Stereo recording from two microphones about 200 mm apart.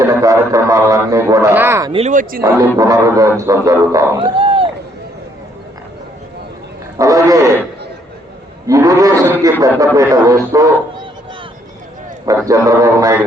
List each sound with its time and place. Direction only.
0.0 s a man's voice: 15° right (ahead or behind)
1.9 s speech: 35° right (ahead or behind)
2.4 s a man's voice: 15° right (ahead or behind)
7.0 s a sound: 15° right (ahead or behind)
8.6 s a man's voice: 15° right (ahead or behind)
12.5 s a man's voice: 15° right (ahead or behind)